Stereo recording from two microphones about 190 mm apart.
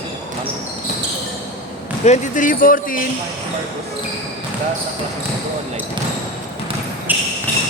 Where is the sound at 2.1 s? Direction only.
45° left (ahead or behind).